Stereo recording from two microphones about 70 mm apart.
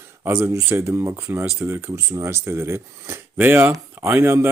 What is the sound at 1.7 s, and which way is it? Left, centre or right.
Speech, right.